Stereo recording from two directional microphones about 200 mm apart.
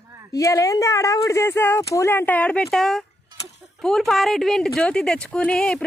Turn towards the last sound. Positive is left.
turn(degrees=5)  # may be behind; listen again after turning